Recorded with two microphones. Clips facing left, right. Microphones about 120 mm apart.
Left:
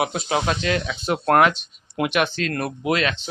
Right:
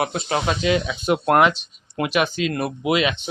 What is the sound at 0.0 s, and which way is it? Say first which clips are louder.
Speech: even; centre (ahead or behind).